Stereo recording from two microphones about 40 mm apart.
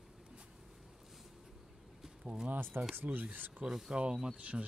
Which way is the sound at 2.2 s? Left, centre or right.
Right.